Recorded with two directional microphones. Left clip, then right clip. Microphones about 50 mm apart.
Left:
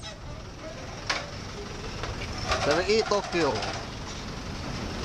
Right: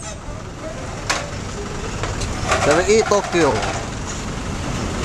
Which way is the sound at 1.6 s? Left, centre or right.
Left.